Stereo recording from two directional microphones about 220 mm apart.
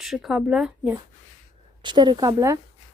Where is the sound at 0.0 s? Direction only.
Centre (ahead or behind).